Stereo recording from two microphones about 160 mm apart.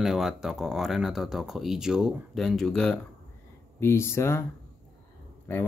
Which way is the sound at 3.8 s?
15° left (ahead or behind).